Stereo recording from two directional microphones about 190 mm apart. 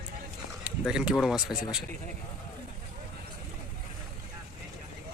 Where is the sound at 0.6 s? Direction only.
5° right (ahead or behind).